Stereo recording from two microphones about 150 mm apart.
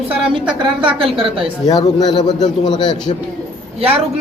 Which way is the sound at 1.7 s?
25° left (ahead or behind).